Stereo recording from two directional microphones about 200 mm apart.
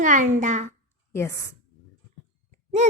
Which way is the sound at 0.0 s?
40° right (ahead or behind).